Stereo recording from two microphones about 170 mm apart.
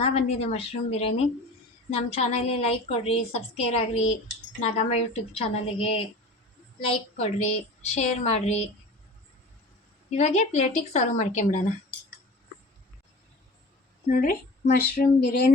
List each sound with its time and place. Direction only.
0.0 s a woman's voice: 35° left (ahead or behind)
10.1 s speech: 40° left (ahead or behind)
14.1 s a woman's voice: 60° left (ahead or behind)